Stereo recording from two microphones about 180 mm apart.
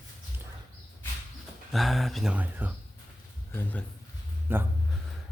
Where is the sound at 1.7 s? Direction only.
Centre (ahead or behind).